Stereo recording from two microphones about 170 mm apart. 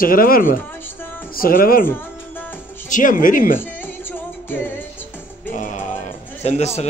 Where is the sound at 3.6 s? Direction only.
10° left (ahead or behind).